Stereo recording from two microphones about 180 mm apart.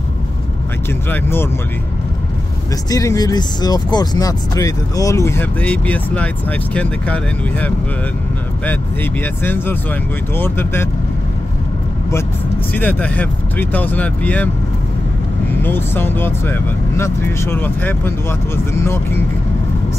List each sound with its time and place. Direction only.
1.1 s speech: 10° left (ahead or behind)
2.9 s speech: 20° left (ahead or behind)
8.6 s speech: 10° left (ahead or behind)
12.7 s speech: 10° left (ahead or behind)
15.6 s speech: 10° left (ahead or behind)